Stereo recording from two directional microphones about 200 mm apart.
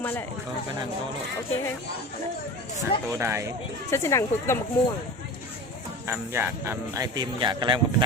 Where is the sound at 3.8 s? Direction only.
15° left (ahead or behind).